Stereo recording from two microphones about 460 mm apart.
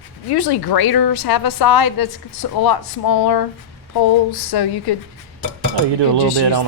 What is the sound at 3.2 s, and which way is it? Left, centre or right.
A woman's voice, left.